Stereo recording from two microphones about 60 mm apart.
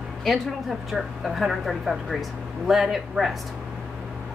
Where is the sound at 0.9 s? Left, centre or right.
Centre.